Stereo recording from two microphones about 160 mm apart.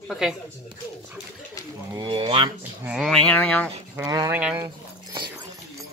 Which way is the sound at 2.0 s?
30° right (ahead or behind).